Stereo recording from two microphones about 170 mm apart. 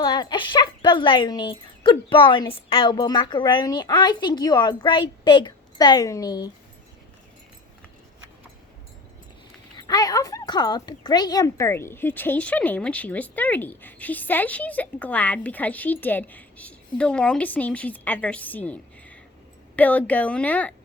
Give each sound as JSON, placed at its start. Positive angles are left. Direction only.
{"t": 0.0, "sound": "speech", "side_deg": 25}
{"t": 9.7, "sound": "speech", "side_deg": 25}